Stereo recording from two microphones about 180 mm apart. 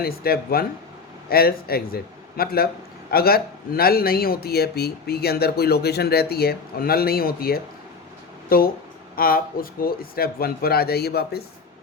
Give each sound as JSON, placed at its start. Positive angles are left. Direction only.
{"t": 0.0, "sound": "a man's voice", "side_deg": 55}